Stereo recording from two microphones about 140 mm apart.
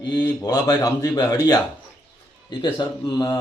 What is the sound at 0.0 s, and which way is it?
Speech, 30° left (ahead or behind).